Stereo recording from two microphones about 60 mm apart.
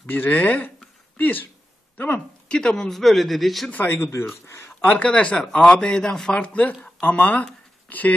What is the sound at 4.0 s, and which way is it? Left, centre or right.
Speech, left.